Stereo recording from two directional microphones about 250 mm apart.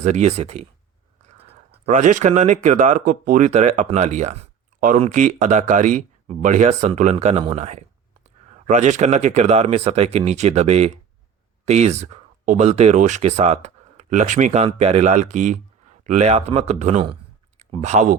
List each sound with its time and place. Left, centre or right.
0.0 s speech: right